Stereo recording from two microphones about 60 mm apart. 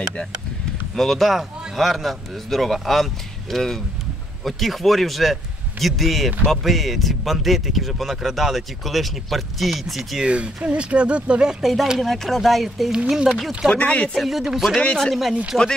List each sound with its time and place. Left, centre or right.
0.9 s speech: centre
10.2 s speech: centre
11.6 s speech: centre
13.7 s speech: centre
14.1 s speech: centre